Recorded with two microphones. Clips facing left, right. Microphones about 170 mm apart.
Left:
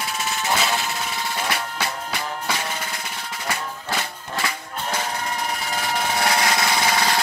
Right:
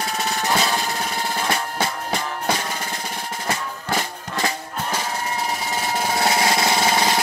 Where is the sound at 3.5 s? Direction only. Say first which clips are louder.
Right 2 dB; 35° right (ahead or behind).